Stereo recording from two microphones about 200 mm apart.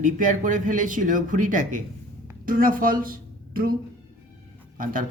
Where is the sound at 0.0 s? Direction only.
40° right (ahead or behind).